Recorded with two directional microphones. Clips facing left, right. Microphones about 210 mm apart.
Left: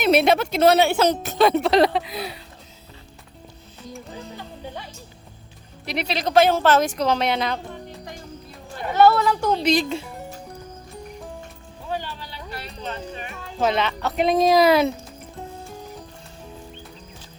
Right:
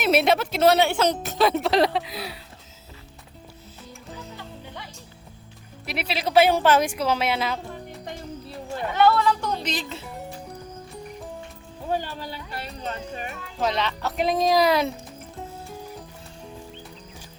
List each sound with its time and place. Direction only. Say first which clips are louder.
0.0 s a woman's voice: left 3 dB; centre (ahead or behind)
5.8 s a woman's voice: left 3 dB; 5° right (ahead or behind)
8.7 s speech: left 3 dB; 40° left (ahead or behind)
9.6 s speech: left 10 dB; 15° left (ahead or behind)
11.9 s a sound: right 3 dB; 45° right (ahead or behind)
13.6 s a woman's voice: left 3 dB; 5° left (ahead or behind)
15.4 s music: left 1 dB; 5° right (ahead or behind)